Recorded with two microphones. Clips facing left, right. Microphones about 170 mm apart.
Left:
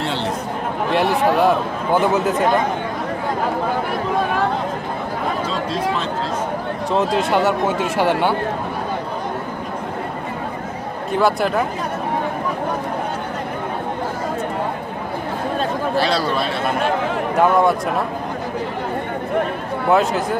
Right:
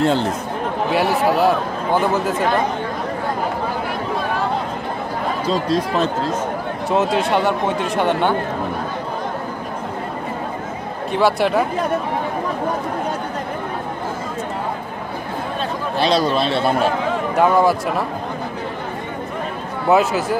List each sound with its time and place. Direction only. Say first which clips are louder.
0.0 s speech: right 6 dB; 45° right (ahead or behind)
0.9 s speech: left 1 dB; 5° right (ahead or behind)
5.5 s speech: right 3 dB; 40° right (ahead or behind)
6.9 s speech: right 1 dB; centre (ahead or behind)
11.1 s speech: right 1 dB; centre (ahead or behind)
16.0 s a man's voice: right 5 dB; 20° right (ahead or behind)
17.4 s speech: even; centre (ahead or behind)
19.9 s speech: right 1 dB; 5° right (ahead or behind)